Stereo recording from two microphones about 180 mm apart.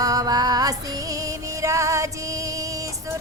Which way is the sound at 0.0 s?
20° right (ahead or behind).